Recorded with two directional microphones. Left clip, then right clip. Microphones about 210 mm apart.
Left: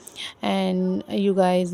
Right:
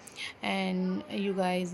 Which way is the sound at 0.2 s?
55° left (ahead or behind).